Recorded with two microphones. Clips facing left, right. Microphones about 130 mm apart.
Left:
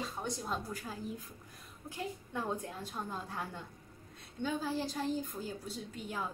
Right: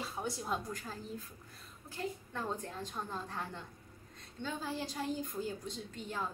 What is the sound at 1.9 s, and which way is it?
A woman's voice, 15° left (ahead or behind).